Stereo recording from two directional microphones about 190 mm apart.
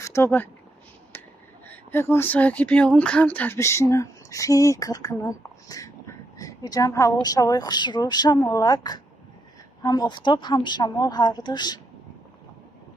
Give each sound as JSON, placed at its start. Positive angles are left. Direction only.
{"t": 0.0, "sound": "speech", "side_deg": 15}
{"t": 1.1, "sound": "finger snapping", "side_deg": 10}
{"t": 1.7, "sound": "speech", "side_deg": 10}